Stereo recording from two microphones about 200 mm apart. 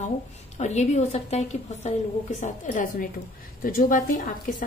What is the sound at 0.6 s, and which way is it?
A woman's voice, 35° left (ahead or behind).